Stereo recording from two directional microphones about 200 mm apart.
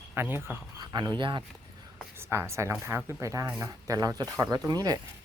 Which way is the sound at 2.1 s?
10° right (ahead or behind).